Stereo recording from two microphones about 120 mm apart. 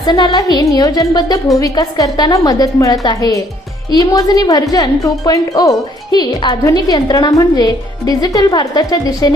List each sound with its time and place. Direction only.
0.0 s speech: 35° left (ahead or behind)